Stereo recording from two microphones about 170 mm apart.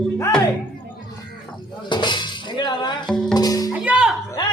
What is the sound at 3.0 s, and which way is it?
Music, 5° left (ahead or behind).